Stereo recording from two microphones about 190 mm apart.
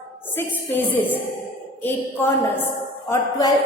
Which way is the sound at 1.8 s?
10° left (ahead or behind).